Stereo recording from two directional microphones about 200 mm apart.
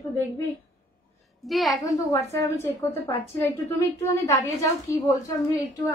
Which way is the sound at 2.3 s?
10° left (ahead or behind).